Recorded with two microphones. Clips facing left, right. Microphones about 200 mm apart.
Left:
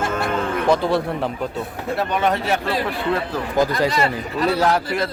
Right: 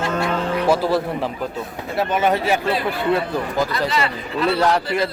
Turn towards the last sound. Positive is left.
turn(degrees=0)  # may be behind; listen again after turning